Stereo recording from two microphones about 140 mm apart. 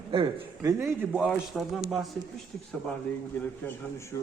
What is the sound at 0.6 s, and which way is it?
Speech, 20° right (ahead or behind).